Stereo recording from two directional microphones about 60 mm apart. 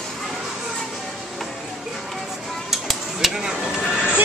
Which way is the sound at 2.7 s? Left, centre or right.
Centre.